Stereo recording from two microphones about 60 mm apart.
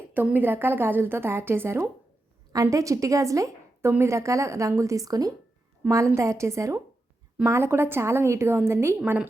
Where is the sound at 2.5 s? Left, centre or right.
Right.